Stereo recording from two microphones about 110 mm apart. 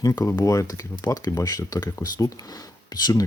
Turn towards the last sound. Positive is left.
turn(degrees=40)  # may be behind; listen again after turning